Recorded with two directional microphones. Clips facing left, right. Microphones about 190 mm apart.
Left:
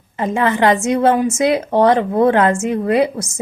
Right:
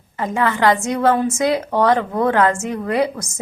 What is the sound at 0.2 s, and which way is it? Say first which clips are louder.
A woman's voice: left 3 dB; 20° left (ahead or behind).